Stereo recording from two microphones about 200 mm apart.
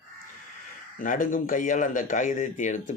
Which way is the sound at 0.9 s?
40° left (ahead or behind).